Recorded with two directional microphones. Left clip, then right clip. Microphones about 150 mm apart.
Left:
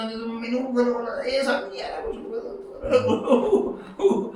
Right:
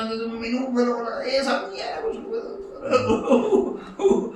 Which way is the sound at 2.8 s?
Centre (ahead or behind).